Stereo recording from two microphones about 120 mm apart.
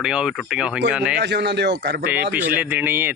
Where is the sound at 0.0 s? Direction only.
5° right (ahead or behind).